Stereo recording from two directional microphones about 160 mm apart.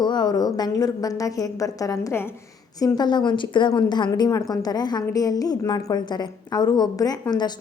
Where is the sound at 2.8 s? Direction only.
25° left (ahead or behind).